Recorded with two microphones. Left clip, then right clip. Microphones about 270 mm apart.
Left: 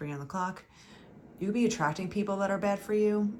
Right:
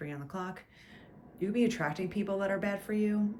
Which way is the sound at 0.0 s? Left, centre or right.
Centre.